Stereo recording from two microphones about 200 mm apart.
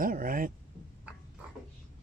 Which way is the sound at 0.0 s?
45° right (ahead or behind).